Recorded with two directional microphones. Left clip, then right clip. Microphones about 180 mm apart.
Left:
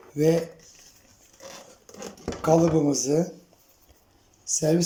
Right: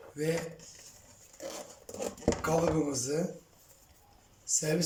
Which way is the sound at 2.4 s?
35° left (ahead or behind).